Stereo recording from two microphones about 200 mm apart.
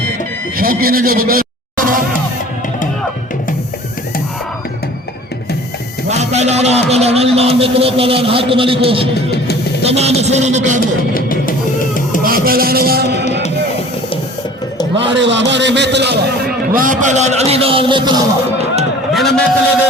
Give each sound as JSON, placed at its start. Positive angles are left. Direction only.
{"t": 0.5, "sound": "speech", "side_deg": -45}
{"t": 6.1, "sound": "a man's voice", "side_deg": -35}
{"t": 11.1, "sound": "music", "side_deg": 45}
{"t": 12.2, "sound": "music", "side_deg": -45}
{"t": 14.9, "sound": "a man's voice", "side_deg": -65}
{"t": 19.1, "sound": "a man's voice", "side_deg": 0}